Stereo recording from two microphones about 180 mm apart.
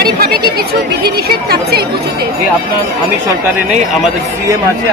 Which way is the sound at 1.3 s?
60° right (ahead or behind).